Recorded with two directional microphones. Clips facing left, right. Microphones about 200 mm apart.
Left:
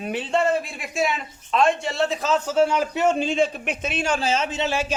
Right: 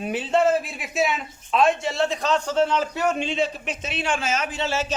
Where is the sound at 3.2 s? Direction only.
45° left (ahead or behind); by 4.9 s 15° left (ahead or behind).